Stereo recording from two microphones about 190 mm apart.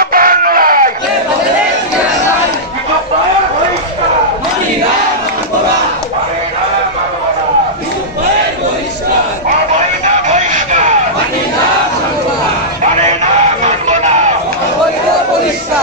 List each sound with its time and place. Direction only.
0.0 s a sound: 50° right (ahead or behind)
10.2 s music: 40° right (ahead or behind)
13.2 s music: 35° right (ahead or behind)